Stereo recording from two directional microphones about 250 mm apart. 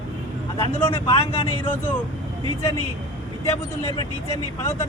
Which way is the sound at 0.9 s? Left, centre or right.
Left.